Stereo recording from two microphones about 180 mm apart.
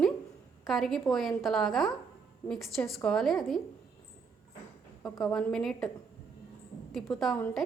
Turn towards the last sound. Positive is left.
turn(degrees=5)  # may be behind; listen again after turning